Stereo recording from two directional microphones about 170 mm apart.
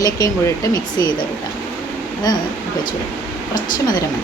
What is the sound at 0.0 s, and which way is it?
Speech, 20° left (ahead or behind).